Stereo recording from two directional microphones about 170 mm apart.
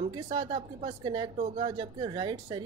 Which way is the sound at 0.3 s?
30° right (ahead or behind).